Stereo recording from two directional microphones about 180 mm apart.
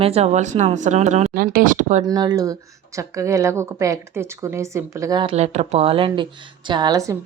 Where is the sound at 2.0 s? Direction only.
20° right (ahead or behind).